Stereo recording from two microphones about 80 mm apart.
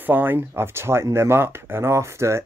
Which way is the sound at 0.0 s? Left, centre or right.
Right.